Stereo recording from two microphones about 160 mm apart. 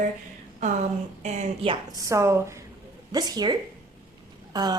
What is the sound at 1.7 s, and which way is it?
A woman's voice, 20° right (ahead or behind).